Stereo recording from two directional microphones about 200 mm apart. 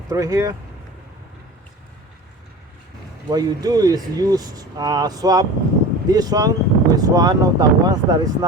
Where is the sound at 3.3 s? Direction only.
20° right (ahead or behind).